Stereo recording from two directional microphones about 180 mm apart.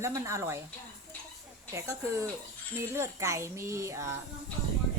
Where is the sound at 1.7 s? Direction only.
15° right (ahead or behind).